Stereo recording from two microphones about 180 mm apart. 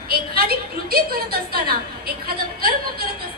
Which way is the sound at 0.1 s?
60° right (ahead or behind).